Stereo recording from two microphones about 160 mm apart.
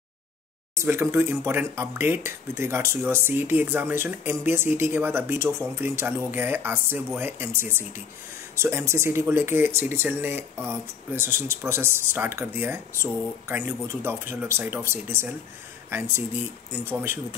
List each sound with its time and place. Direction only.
0.7 s speech: 15° right (ahead or behind)